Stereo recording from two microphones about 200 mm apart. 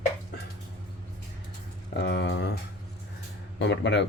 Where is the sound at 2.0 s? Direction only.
55° left (ahead or behind).